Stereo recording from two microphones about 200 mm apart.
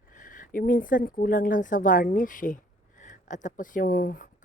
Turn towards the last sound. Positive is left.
turn(degrees=45)  # may be behind; listen again after turning